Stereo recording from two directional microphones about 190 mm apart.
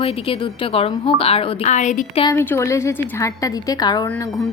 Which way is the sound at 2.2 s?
15° left (ahead or behind).